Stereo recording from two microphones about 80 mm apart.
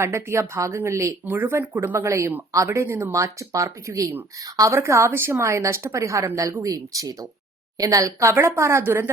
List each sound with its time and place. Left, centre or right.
0.0 s a woman's voice: right
1.2 s a woman's voice: right